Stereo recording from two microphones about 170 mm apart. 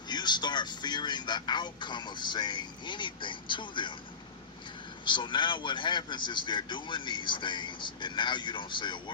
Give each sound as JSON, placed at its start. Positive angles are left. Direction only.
{"t": 0.1, "sound": "speech", "side_deg": 25}
{"t": 5.0, "sound": "speech", "side_deg": 25}